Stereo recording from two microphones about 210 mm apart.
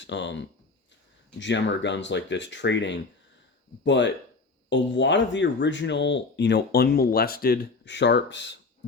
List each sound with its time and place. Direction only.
0.0 s speech: 60° left (ahead or behind)